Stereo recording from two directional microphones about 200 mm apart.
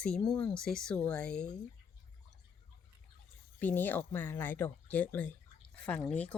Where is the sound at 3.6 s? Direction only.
10° left (ahead or behind).